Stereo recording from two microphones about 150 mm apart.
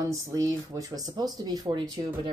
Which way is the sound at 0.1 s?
25° right (ahead or behind).